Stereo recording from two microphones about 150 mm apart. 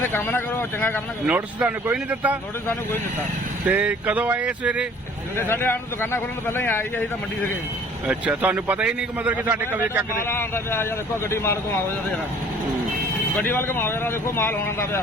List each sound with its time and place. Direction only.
0.0 s speech: 15° left (ahead or behind)
1.3 s a man's voice: 10° right (ahead or behind)
3.7 s a man's voice: 10° right (ahead or behind)
5.4 s speech: 15° left (ahead or behind)
8.0 s a man's voice: 10° right (ahead or behind)
10.2 s speech: 15° left (ahead or behind)
13.4 s speech: 15° left (ahead or behind)